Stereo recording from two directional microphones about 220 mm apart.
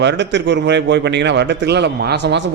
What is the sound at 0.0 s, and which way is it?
A man's voice, 50° right (ahead or behind).